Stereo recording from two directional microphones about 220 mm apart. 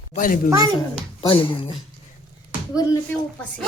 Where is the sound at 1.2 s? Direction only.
25° left (ahead or behind).